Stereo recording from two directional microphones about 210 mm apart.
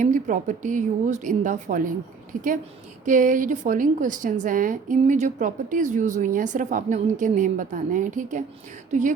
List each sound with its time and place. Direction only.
0.0 s a woman's voice: 35° right (ahead or behind)